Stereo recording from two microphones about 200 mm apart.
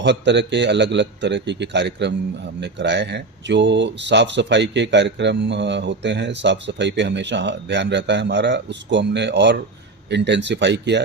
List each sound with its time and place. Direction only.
0.0 s speech: 60° right (ahead or behind)